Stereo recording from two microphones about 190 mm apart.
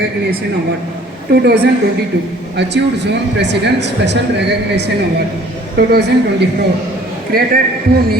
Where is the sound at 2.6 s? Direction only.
65° right (ahead or behind).